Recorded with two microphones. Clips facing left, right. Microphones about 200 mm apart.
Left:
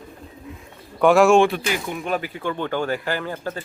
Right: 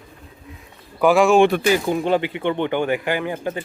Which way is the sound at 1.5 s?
35° right (ahead or behind).